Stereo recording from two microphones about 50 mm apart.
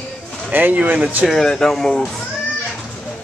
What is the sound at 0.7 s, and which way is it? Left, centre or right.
Speech, right.